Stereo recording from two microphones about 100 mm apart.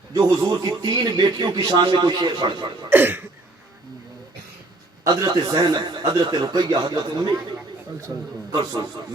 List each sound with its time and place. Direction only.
0.1 s a man's voice: 45° right (ahead or behind)
2.9 s cough: 20° right (ahead or behind)
5.0 s a man's voice: 45° right (ahead or behind)